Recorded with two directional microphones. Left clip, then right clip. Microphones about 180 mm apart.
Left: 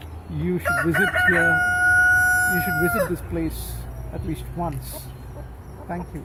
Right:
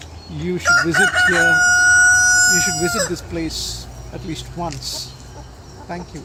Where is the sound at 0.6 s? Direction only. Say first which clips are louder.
Right 7 dB; 60° right (ahead or behind).